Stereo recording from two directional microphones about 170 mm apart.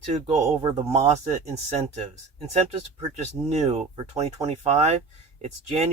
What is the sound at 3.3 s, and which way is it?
Speech, 40° right (ahead or behind).